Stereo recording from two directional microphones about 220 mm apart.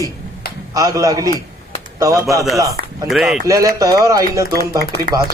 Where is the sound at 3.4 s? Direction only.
15° right (ahead or behind).